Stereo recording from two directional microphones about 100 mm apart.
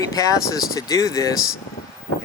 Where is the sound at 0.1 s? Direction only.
35° left (ahead or behind).